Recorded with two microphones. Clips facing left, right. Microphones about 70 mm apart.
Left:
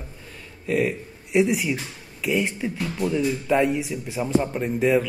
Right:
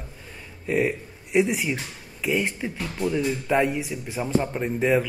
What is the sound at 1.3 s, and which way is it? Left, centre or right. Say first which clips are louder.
Speech: left 1 dB; centre.